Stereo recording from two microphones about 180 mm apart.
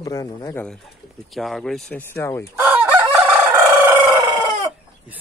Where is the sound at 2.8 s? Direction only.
10° right (ahead or behind).